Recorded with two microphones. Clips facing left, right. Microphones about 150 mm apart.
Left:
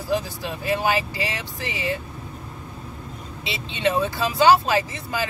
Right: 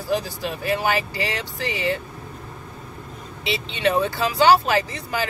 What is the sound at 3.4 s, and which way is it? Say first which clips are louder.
Speech: right 2 dB; 20° left (ahead or behind).